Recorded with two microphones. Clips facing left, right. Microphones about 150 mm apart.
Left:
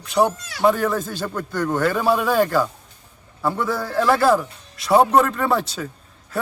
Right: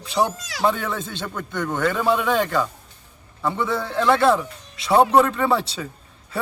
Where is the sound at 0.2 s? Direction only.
15° left (ahead or behind).